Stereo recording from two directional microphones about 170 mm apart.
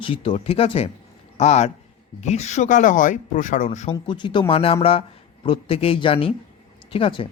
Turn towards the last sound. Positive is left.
turn(degrees=30)  # may be behind; listen again after turning